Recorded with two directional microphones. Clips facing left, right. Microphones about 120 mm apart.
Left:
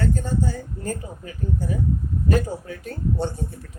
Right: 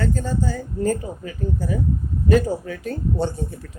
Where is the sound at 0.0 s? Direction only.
90° right.